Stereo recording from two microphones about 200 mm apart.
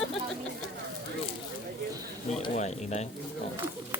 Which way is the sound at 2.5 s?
35° left (ahead or behind).